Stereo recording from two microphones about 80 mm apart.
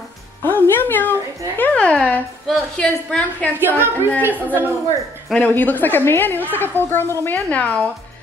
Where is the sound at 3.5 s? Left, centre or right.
Right.